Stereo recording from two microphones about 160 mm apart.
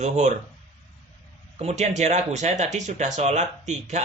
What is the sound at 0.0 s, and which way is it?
Speech, 50° right (ahead or behind).